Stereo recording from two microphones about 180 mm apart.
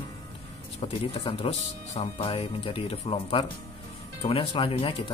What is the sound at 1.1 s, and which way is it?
Speech, 30° left (ahead or behind).